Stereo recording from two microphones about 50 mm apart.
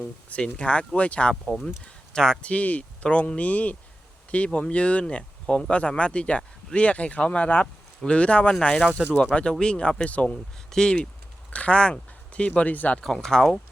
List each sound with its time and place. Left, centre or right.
0.0 s speech: left
1.6 s speech: centre
2.4 s speech: left
10.7 s speech: centre
12.5 s speech: left
13.1 s speech: centre